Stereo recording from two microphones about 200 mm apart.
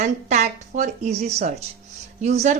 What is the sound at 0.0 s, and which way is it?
A woman's voice, 35° right (ahead or behind).